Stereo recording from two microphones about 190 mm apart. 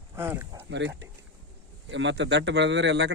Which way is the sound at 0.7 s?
70° right (ahead or behind).